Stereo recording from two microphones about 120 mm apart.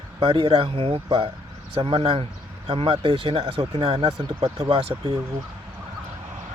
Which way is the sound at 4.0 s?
30° right (ahead or behind).